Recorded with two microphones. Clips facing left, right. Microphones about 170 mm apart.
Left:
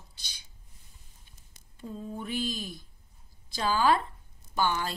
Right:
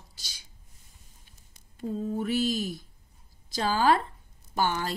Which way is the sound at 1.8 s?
45° right (ahead or behind).